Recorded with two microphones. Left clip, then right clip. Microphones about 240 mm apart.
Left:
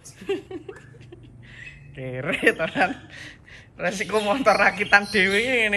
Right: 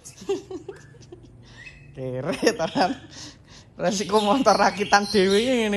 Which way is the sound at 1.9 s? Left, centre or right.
Right.